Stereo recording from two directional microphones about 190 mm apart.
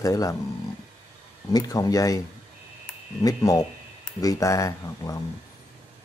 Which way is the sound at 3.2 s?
20° left (ahead or behind).